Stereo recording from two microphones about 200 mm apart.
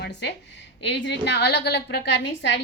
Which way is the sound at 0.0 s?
55° left (ahead or behind).